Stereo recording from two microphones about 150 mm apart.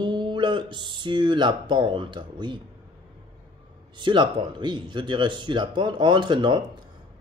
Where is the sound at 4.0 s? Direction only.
30° right (ahead or behind).